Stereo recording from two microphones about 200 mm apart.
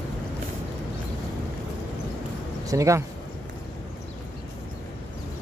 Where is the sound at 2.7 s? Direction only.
15° right (ahead or behind).